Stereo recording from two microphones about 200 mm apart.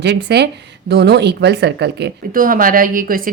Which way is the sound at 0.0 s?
55° right (ahead or behind).